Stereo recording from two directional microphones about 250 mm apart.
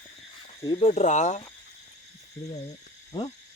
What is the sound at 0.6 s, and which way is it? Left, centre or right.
Speech, left.